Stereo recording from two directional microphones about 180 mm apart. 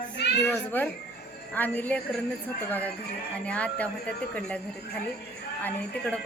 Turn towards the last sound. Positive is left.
turn(degrees=10)  # may be behind; listen again after turning